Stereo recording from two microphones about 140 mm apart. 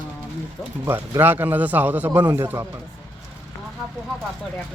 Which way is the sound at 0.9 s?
15° right (ahead or behind).